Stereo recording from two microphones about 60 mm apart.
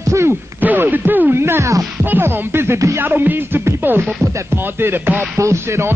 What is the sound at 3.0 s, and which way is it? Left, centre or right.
Music, right.